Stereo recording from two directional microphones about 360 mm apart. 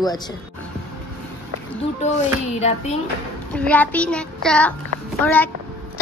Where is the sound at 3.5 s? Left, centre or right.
Centre.